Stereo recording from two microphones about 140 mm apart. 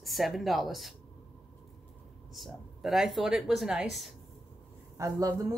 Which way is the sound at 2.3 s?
Centre (ahead or behind).